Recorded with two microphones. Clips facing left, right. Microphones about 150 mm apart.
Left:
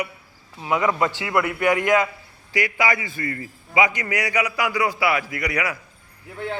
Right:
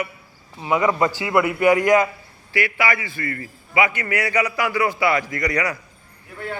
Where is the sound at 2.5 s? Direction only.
20° left (ahead or behind).